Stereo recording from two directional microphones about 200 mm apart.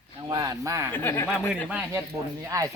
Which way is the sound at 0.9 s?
10° left (ahead or behind).